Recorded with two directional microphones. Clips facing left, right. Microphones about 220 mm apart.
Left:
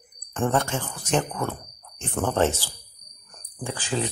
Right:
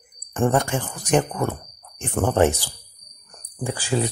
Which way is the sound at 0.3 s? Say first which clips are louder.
Right 4 dB; 15° right (ahead or behind).